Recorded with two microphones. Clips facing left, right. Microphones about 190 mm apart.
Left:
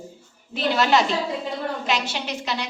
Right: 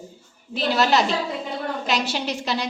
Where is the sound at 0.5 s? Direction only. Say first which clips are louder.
Even; 35° right (ahead or behind).